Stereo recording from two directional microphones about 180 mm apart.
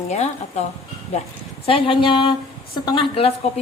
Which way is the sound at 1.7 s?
30° left (ahead or behind).